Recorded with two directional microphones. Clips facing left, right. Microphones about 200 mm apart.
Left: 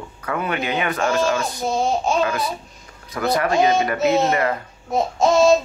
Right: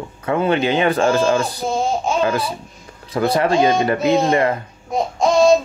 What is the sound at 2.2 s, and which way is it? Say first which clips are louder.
Speech: right 2 dB; 30° right (ahead or behind).